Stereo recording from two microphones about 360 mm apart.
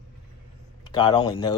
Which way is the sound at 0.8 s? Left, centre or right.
Centre.